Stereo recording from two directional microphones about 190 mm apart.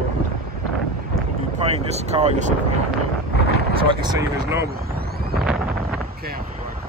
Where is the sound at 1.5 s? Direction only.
30° right (ahead or behind).